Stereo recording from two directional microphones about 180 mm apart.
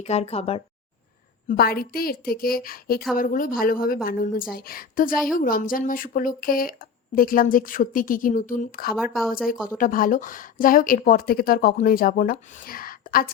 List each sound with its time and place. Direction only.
0.0 s speech: 35° left (ahead or behind)
1.5 s a woman's voice: 55° left (ahead or behind)